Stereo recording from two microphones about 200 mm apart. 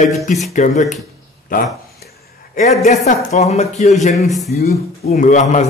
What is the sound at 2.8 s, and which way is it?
Speech, 35° left (ahead or behind).